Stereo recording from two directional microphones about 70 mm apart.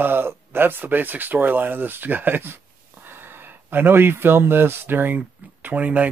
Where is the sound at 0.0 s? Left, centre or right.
Right.